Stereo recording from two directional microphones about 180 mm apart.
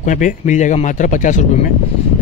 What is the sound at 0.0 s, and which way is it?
Speech, 45° left (ahead or behind).